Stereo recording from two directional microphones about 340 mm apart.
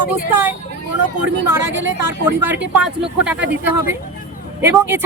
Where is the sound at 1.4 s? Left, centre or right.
Right.